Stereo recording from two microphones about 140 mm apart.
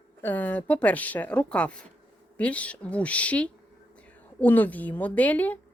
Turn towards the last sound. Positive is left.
turn(degrees=10)  # may be behind; listen again after turning